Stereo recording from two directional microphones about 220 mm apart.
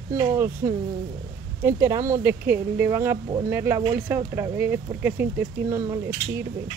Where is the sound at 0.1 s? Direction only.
15° right (ahead or behind).